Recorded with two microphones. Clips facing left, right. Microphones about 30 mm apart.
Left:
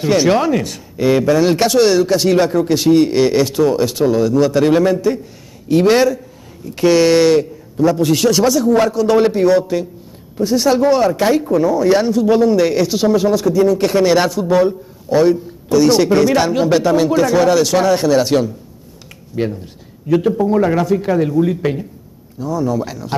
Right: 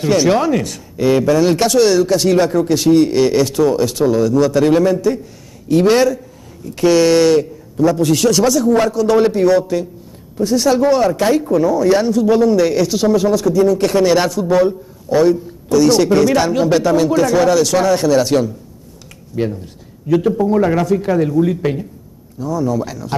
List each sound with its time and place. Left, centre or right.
0.0 s speech: centre
19.6 s a man's voice: centre